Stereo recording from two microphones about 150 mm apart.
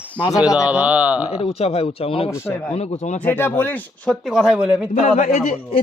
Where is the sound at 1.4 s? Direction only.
40° left (ahead or behind).